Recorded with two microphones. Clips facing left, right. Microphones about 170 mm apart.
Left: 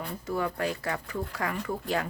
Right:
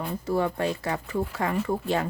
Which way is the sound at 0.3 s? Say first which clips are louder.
Right 4 dB; 30° right (ahead or behind).